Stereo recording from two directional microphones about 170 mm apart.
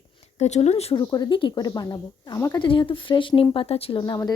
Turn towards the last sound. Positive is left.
turn(degrees=25)  # may be behind; listen again after turning